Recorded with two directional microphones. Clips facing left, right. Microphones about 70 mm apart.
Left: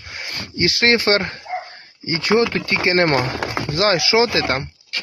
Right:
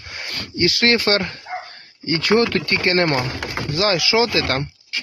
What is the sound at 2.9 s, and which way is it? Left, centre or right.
Speech, left.